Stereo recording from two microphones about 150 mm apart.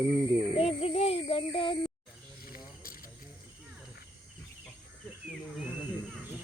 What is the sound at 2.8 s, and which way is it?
Camera, 70° left (ahead or behind).